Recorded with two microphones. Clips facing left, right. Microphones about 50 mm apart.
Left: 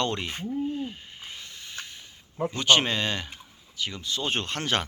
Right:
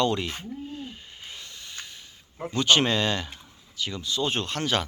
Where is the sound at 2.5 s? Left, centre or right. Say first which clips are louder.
Right 1 dB; centre.